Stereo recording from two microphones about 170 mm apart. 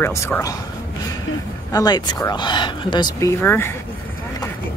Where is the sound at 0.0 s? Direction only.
15° left (ahead or behind).